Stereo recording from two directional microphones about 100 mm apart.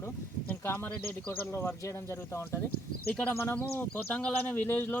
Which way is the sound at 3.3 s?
25° left (ahead or behind).